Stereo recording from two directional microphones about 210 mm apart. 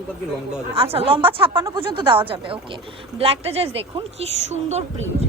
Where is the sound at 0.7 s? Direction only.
25° right (ahead or behind).